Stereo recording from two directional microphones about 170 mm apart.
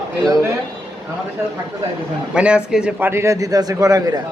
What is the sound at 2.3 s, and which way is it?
A man's voice, 5° right (ahead or behind).